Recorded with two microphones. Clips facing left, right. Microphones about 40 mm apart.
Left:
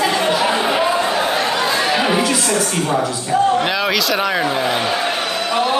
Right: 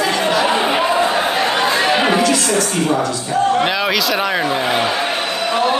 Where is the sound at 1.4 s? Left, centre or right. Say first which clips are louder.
Right 2 dB; right.